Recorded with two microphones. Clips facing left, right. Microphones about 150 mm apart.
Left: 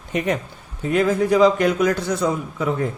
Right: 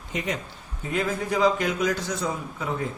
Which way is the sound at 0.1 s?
60° left (ahead or behind).